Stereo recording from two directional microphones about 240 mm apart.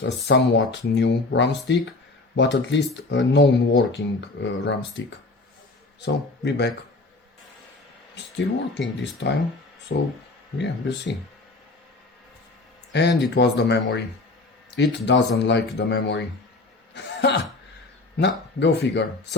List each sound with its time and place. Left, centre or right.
0.3 s speech: left
8.1 s speech: left
12.9 s speech: left
16.9 s a sound: left
18.2 s speech: left